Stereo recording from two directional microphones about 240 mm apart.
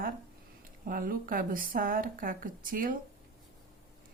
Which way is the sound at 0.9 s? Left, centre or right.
Right.